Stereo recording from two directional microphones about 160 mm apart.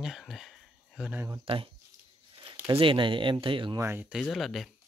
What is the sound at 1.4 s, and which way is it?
Speech, 35° right (ahead or behind).